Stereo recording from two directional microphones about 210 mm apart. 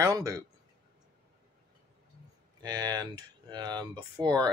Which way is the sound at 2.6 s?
20° right (ahead or behind).